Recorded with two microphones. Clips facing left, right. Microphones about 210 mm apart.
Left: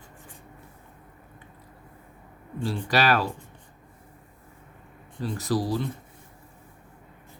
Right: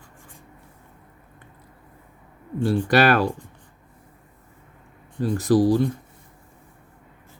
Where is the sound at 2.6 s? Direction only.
55° right (ahead or behind).